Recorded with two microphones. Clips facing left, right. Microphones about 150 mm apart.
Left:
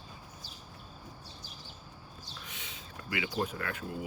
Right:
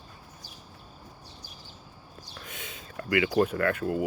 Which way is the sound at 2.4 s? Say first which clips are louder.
Right 7 dB; 50° right (ahead or behind).